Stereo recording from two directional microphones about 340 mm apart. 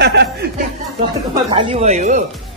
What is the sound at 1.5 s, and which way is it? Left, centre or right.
Speech, centre.